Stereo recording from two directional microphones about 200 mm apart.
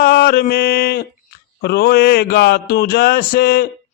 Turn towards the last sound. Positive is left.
turn(degrees=50)  # may be behind; listen again after turning